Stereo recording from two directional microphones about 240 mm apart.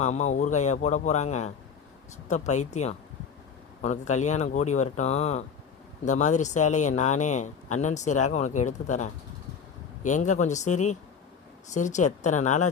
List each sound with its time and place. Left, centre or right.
0.0 s speech: left